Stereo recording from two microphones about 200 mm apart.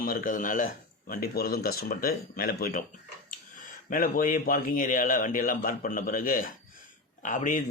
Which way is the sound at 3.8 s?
45° left (ahead or behind).